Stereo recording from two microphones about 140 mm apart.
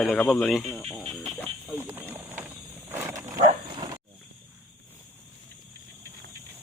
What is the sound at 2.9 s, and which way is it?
Wild animals, 15° right (ahead or behind).